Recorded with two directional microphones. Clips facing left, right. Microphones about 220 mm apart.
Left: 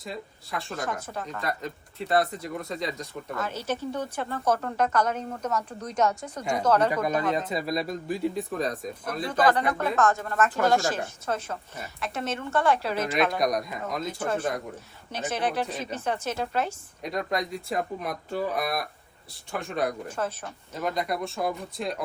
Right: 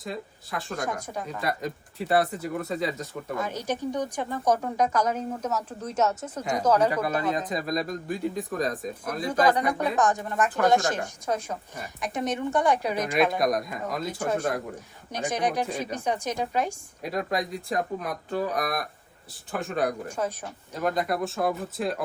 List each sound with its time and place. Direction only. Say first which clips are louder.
0.0 s speech: right 2 dB; centre (ahead or behind)
0.9 s speech: right 1 dB; 10° right (ahead or behind)
7.5 s speech: even; 5° left (ahead or behind)
9.3 s speech: right 1 dB; 10° right (ahead or behind)
13.4 s speech: right 1 dB; centre (ahead or behind)
14.1 s speech: right 2 dB; 10° right (ahead or behind)
20.1 s speech: right 1 dB; 10° right (ahead or behind)